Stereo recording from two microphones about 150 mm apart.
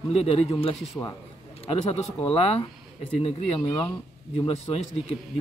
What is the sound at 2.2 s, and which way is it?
A man's voice, 40° left (ahead or behind).